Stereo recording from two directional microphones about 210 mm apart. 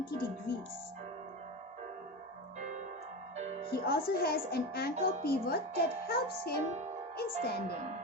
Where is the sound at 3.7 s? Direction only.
50° left (ahead or behind).